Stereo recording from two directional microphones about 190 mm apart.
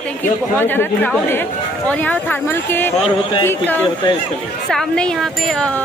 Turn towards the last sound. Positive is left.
turn(degrees=0)  # may be behind; listen again after turning